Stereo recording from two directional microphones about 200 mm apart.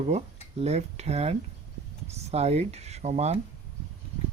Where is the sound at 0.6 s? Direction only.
30° right (ahead or behind).